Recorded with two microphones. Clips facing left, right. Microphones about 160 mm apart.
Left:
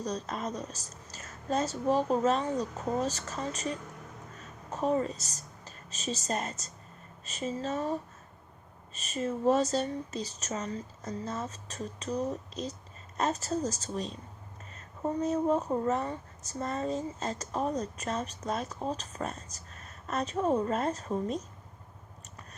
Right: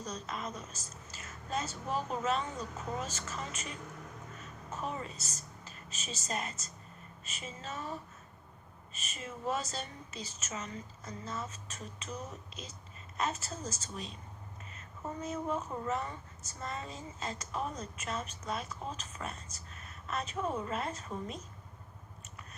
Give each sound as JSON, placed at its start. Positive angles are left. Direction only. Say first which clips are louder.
{"t": 0.0, "sound": "a woman's voice", "louder": "left 6 dB", "side_deg": 40}